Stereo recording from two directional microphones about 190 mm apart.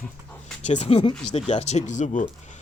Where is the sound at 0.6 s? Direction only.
35° left (ahead or behind).